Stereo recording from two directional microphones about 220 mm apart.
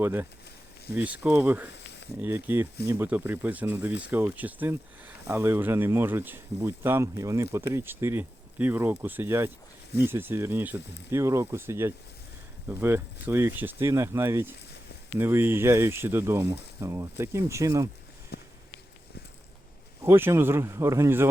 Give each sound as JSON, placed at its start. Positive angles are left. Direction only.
{"t": 0.0, "sound": "speech", "side_deg": -10}
{"t": 18.3, "sound": "a sound", "side_deg": 45}
{"t": 20.1, "sound": "speech", "side_deg": -10}